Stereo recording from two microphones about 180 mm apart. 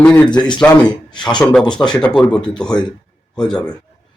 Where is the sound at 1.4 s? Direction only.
5° left (ahead or behind).